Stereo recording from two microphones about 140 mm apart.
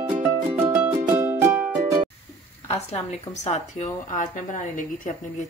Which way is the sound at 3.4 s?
55° left (ahead or behind).